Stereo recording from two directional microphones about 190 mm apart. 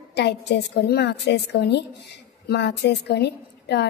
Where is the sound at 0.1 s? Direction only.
60° left (ahead or behind).